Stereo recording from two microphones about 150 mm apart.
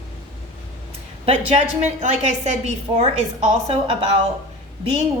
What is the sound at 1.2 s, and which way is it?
A woman's voice, 45° right (ahead or behind).